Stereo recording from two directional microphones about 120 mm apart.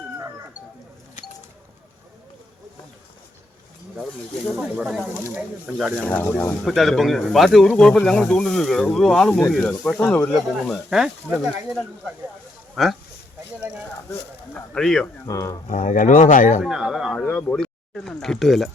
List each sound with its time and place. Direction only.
4.4 s speech: 5° right (ahead or behind)
5.9 s speech: 15° left (ahead or behind)
6.7 s speech: centre (ahead or behind)
10.7 s speech: 5° right (ahead or behind)
14.7 s speech: 5° left (ahead or behind)
15.3 s speech: 25° left (ahead or behind)
15.6 s speech: 90° left
16.6 s speech: 5° right (ahead or behind)
17.2 s speech: 10° left (ahead or behind)